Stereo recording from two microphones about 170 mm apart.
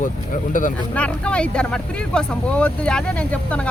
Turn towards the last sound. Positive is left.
turn(degrees=10)  # may be behind; listen again after turning